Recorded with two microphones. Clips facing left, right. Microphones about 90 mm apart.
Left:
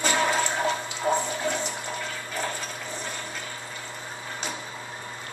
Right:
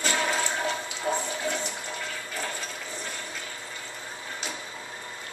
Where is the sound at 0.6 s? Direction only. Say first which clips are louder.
Left 3 dB; 10° left (ahead or behind).